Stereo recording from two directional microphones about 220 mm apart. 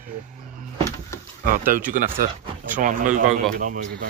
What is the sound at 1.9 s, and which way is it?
Speech, 40° right (ahead or behind).